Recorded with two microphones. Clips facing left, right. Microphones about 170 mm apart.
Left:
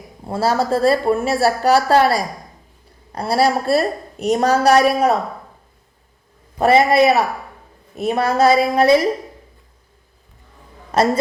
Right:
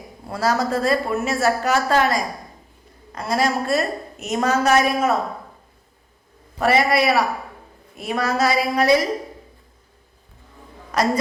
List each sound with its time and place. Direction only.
0.3 s a woman's voice: 30° left (ahead or behind)
6.6 s a woman's voice: 25° left (ahead or behind)
10.9 s a woman's voice: 25° left (ahead or behind)